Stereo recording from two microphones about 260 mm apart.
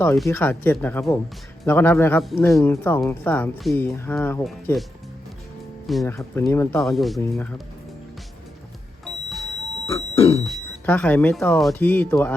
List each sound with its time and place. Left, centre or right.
0.0 s speech: centre
9.8 s music: centre
10.4 s speech: centre